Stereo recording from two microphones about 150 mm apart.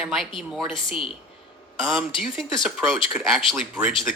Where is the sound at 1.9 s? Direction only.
Centre (ahead or behind).